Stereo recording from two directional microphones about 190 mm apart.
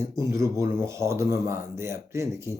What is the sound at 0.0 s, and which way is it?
Speech, 15° right (ahead or behind).